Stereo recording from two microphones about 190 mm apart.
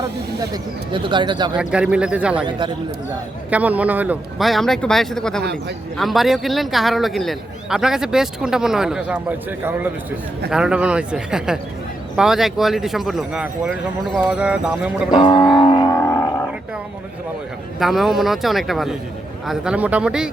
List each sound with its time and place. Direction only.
0.3 s speech: 25° right (ahead or behind)
1.5 s a man's voice: 5° right (ahead or behind)
2.5 s speech: 25° right (ahead or behind)
3.5 s a man's voice: 10° right (ahead or behind)
5.4 s a man's voice: 60° right (ahead or behind)
6.0 s a man's voice: centre (ahead or behind)
10.5 s a man's voice: 5° right (ahead or behind)
15.1 s a sound: 25° left (ahead or behind)
17.7 s a man's voice: centre (ahead or behind)